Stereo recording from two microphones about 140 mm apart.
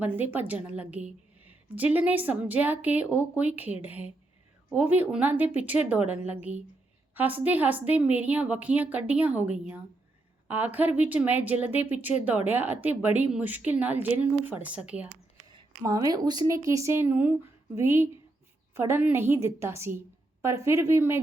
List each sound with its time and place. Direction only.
0.0 s a woman's voice: 15° right (ahead or behind)
15.8 s a woman's voice: 25° right (ahead or behind)